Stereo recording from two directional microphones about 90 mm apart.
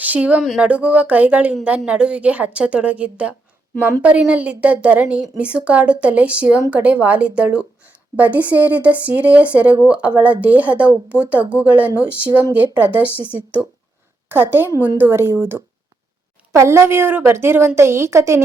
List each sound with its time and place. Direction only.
0.0 s a woman's voice: 15° right (ahead or behind)
14.3 s a woman's voice: 25° right (ahead or behind)